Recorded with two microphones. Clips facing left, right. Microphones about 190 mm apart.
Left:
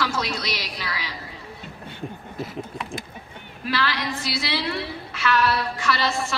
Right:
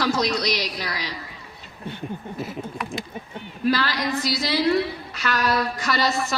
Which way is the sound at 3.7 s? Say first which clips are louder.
Right 3 dB; 40° right (ahead or behind).